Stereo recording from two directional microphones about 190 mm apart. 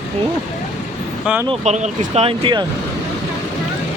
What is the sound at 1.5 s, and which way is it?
Speech, 35° right (ahead or behind).